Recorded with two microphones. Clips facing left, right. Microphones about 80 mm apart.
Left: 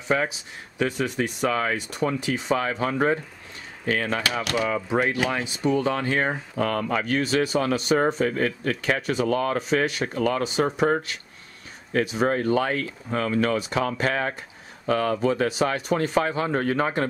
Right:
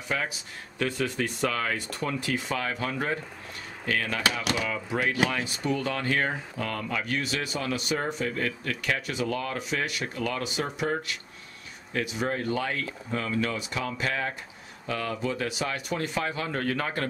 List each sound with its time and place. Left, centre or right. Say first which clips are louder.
0.1 s speech: left 6 dB; left
6.5 s speech: left 7 dB; left